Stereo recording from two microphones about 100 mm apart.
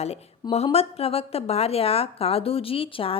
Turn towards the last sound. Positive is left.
turn(degrees=65)  # may be behind; listen again after turning